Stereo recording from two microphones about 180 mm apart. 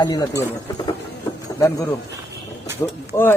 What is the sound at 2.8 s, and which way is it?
Speech, 15° left (ahead or behind).